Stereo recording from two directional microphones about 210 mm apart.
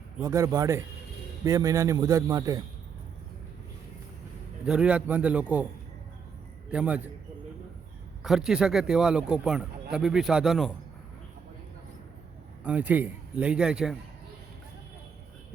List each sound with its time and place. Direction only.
0.2 s a man's voice: 15° right (ahead or behind)
4.6 s speech: 5° right (ahead or behind)
6.7 s a man's voice: 5° right (ahead or behind)
8.2 s speech: centre (ahead or behind)
12.6 s a man's voice: 5° right (ahead or behind)